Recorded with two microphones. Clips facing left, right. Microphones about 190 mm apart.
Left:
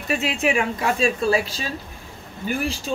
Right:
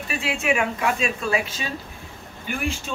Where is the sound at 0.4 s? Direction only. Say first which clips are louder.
Right 2 dB; 35° left (ahead or behind).